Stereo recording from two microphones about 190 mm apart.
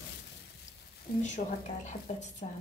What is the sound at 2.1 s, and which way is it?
Speech, 35° left (ahead or behind).